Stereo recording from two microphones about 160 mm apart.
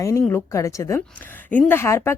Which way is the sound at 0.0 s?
15° left (ahead or behind).